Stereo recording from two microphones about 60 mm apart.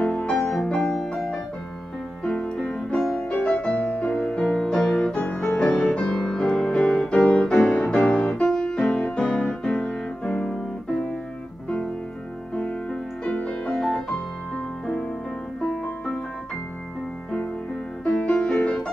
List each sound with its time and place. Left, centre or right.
0.0 s music: centre
13.2 s music: centre
18.0 s music: centre